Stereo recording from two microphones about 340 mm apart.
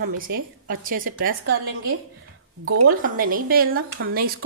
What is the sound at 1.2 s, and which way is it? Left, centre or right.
Speech, right.